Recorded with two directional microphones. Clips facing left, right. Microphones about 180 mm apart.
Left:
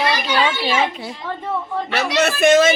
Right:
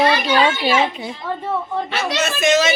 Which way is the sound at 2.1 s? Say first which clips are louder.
Left 4 dB; 60° left (ahead or behind).